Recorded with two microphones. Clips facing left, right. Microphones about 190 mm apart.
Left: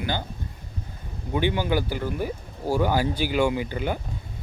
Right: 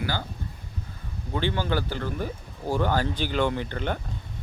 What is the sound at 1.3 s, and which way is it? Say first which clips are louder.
Speech: left 3 dB; 15° left (ahead or behind).